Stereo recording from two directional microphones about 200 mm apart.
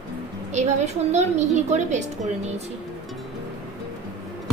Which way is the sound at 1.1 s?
35° right (ahead or behind).